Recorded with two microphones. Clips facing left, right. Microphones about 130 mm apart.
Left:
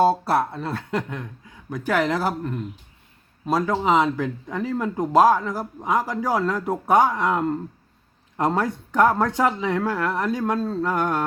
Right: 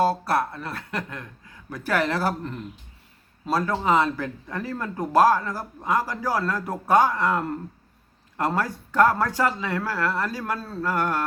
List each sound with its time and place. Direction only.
0.0 s speech: 25° left (ahead or behind)